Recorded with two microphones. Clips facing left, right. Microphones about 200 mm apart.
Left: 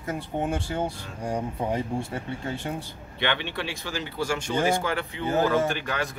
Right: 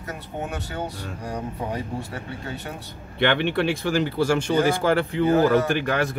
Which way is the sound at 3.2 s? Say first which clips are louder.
Right 8 dB; 55° right (ahead or behind).